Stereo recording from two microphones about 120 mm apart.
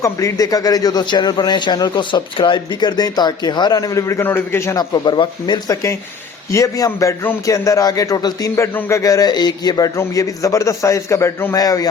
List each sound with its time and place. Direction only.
0.0 s a man's voice: 25° left (ahead or behind)
4.8 s a man's voice: 40° left (ahead or behind)
6.5 s a man's voice: 25° left (ahead or behind)